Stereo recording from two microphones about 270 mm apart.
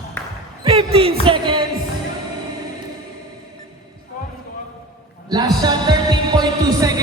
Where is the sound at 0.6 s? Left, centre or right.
Right.